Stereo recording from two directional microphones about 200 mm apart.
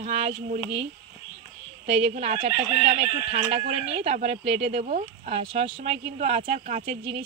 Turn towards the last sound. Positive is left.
turn(degrees=-35)  # may be behind; listen again after turning